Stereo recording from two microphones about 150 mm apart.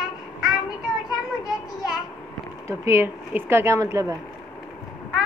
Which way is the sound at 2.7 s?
20° right (ahead or behind).